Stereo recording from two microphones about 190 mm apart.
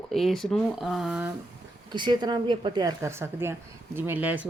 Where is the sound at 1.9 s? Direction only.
25° right (ahead or behind).